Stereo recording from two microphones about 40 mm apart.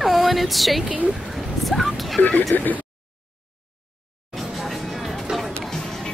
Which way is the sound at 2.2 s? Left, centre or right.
Left.